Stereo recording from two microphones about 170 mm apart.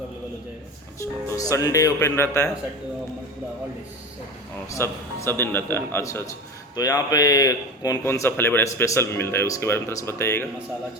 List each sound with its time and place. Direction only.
0.9 s a man's voice: 20° left (ahead or behind)
4.7 s a man's voice: 15° left (ahead or behind)